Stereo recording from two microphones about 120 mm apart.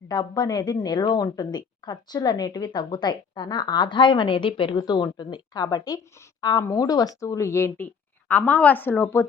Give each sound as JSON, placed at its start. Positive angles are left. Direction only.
{"t": 0.1, "sound": "a woman's voice", "side_deg": 35}